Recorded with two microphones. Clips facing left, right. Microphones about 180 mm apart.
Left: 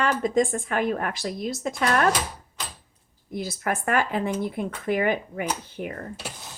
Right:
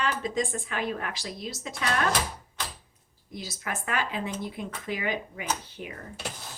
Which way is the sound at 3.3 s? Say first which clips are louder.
Left 8 dB; 55° left (ahead or behind).